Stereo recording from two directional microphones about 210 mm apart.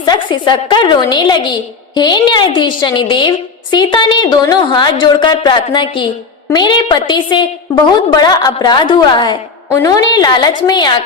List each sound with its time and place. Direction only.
0.0 s a woman's voice: 20° left (ahead or behind)